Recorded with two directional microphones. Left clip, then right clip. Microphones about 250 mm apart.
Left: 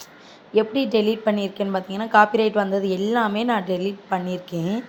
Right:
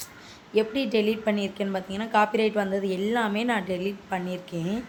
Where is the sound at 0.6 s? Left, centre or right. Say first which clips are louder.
Left 4 dB; centre.